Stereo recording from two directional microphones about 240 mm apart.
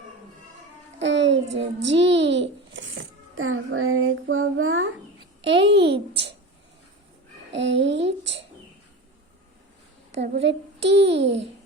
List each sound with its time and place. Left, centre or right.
1.0 s child singing: right
1.5 s a child's voice: right
7.5 s a child's voice: right
10.2 s a child's voice: right